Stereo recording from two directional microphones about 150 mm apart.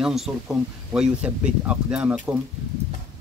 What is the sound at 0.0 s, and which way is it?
Speech, centre (ahead or behind).